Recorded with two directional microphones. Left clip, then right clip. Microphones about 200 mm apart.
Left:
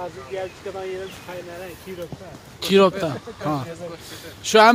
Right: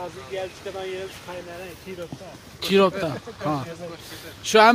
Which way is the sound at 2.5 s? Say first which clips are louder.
Left 3 dB; 5° left (ahead or behind).